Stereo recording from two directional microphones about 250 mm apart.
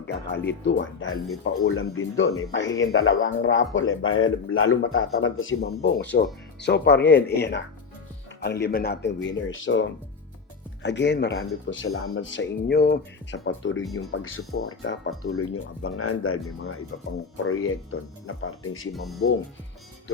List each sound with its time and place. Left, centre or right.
0.1 s speech: left
13.4 s speech: left